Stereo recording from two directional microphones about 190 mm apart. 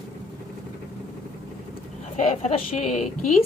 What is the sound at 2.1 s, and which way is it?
Speech, 40° left (ahead or behind).